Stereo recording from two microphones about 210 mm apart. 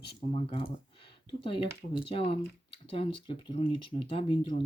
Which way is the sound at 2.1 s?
25° left (ahead or behind).